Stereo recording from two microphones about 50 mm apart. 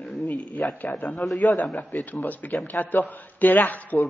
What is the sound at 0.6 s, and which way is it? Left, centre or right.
A man's voice, left.